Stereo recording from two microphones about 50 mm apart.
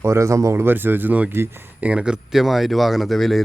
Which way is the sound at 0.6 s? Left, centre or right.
Right.